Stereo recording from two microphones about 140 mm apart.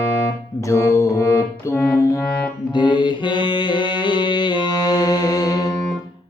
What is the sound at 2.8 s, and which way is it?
Mantra, 35° left (ahead or behind).